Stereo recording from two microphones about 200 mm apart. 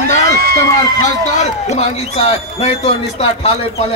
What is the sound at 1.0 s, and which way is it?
A man's voice, 35° left (ahead or behind).